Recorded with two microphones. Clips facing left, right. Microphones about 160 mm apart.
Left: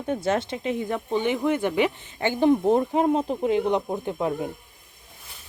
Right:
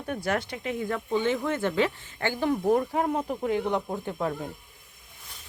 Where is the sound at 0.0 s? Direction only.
25° left (ahead or behind).